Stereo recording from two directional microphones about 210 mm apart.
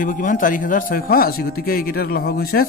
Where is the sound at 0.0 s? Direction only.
40° left (ahead or behind).